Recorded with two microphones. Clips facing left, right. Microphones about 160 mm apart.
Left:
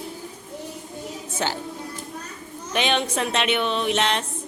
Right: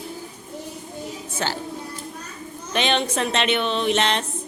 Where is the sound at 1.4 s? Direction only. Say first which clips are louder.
Even; 15° left (ahead or behind).